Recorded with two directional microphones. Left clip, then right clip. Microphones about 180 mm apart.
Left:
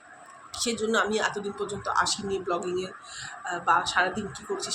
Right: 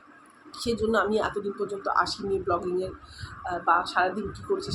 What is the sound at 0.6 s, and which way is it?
Speech, 10° right (ahead or behind).